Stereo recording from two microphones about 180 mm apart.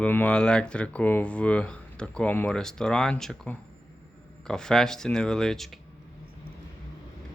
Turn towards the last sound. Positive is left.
turn(degrees=0)  # may be behind; listen again after turning